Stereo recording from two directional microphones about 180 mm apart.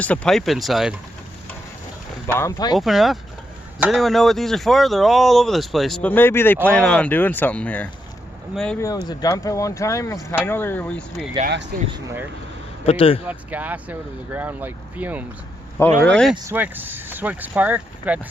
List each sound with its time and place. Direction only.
0.0 s speech: 5° left (ahead or behind)
2.2 s speech: 15° left (ahead or behind)
2.7 s speech: centre (ahead or behind)
8.8 s speech: 20° left (ahead or behind)
11.4 s speech: 65° right (ahead or behind)
12.8 s speech: 30° left (ahead or behind)
13.2 s speech: 10° right (ahead or behind)
16.0 s speech: 5° left (ahead or behind)
16.5 s speech: 10° right (ahead or behind)